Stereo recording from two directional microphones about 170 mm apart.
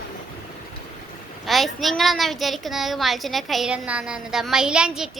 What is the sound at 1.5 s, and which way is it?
A woman's voice, centre (ahead or behind).